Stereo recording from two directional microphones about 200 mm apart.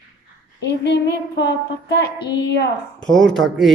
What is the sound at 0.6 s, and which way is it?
Child singing, 55° left (ahead or behind).